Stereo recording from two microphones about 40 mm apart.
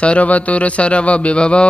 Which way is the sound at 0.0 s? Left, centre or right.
Left.